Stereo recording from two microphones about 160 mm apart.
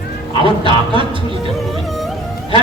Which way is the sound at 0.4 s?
30° right (ahead or behind).